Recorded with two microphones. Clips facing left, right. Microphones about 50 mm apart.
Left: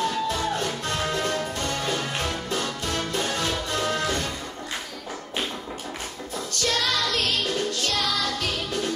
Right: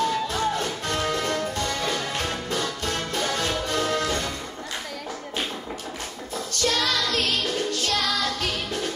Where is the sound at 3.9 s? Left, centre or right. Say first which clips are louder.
Right 1 dB; left.